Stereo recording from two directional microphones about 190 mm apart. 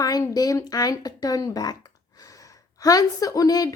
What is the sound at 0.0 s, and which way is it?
A woman's voice, 20° left (ahead or behind).